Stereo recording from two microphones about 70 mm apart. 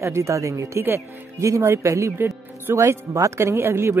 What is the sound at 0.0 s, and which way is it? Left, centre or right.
Speech, right.